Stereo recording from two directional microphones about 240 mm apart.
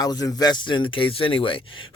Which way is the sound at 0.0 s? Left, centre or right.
Centre.